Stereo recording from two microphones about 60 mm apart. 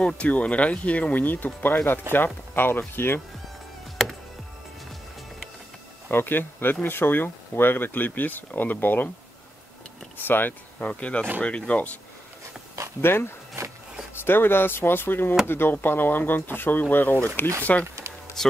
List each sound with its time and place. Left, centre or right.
0.0 s speech: left
4.0 s music: centre
6.0 s speech: left
10.1 s speech: left
10.9 s speech: left
13.0 s speech: left
13.6 s a sound: right
14.1 s speech: left